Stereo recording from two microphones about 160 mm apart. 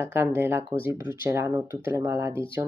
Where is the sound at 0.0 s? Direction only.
15° right (ahead or behind).